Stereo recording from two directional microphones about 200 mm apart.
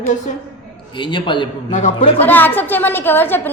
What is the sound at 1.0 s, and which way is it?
Speech, 25° left (ahead or behind).